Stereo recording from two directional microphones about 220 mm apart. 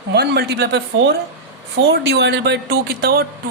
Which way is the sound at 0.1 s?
50° right (ahead or behind).